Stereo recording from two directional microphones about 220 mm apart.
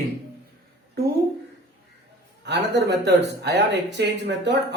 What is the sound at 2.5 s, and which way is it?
Speech, 50° right (ahead or behind).